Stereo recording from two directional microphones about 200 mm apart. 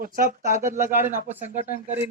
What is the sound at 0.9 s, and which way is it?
Speech, 10° right (ahead or behind).